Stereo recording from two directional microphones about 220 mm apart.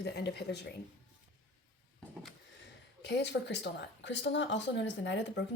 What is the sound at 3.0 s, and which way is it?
A woman's voice, 50° left (ahead or behind).